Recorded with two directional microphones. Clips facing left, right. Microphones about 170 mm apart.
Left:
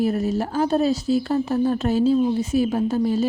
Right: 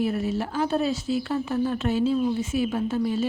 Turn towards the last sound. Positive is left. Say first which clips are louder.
# left 4 dB
turn(degrees=40)  # may be behind; listen again after turning